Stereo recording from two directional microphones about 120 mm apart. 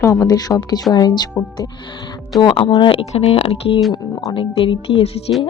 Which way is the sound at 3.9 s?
40° left (ahead or behind).